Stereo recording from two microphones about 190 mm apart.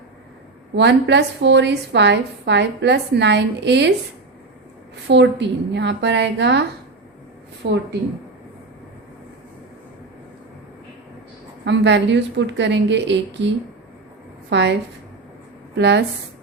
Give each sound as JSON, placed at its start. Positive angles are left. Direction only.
{"t": 0.8, "sound": "a woman's voice", "side_deg": -65}
{"t": 5.0, "sound": "a woman's voice", "side_deg": -65}
{"t": 11.6, "sound": "a woman's voice", "side_deg": -70}
{"t": 14.5, "sound": "a woman's voice", "side_deg": -70}